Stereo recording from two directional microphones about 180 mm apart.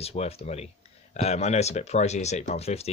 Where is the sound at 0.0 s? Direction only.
35° left (ahead or behind).